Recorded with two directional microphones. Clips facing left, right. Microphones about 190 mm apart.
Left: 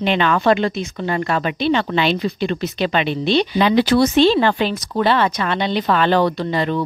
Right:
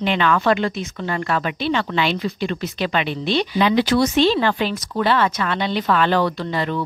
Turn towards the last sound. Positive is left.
turn(degrees=25)  # may be behind; listen again after turning